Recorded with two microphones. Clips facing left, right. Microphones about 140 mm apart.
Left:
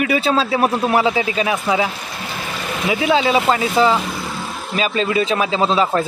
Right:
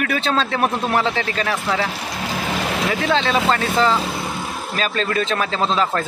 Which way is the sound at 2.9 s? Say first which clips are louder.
Left 5 dB; 10° left (ahead or behind).